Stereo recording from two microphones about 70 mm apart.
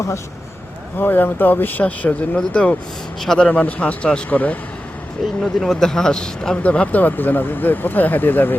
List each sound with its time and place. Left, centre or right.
0.9 s speech: left
5.2 s speech: centre; by 8.5 s left